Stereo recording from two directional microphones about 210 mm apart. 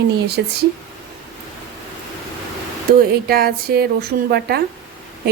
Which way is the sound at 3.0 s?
45° right (ahead or behind).